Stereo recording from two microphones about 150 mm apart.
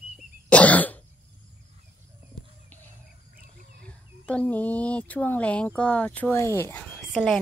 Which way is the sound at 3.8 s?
5° left (ahead or behind).